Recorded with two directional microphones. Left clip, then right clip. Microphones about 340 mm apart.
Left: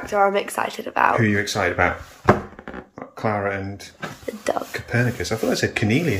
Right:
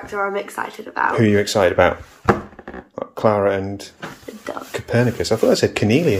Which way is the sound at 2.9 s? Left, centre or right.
Centre.